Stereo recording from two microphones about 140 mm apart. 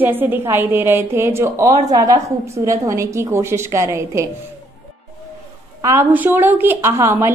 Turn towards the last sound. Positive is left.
turn(degrees=-20)  # may be behind; listen again after turning